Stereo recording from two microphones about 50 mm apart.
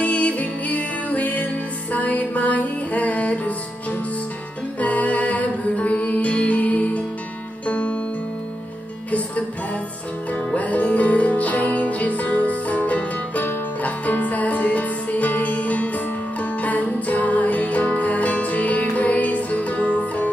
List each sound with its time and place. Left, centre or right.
0.0 s music: left
4.7 s music: left
10.5 s music: left